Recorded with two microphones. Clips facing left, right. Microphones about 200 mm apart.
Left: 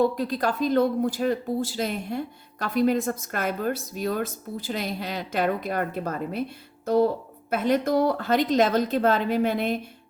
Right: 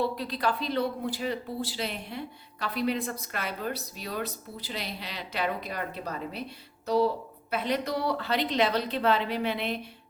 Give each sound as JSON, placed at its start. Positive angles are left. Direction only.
{"t": 0.0, "sound": "speech", "side_deg": 45}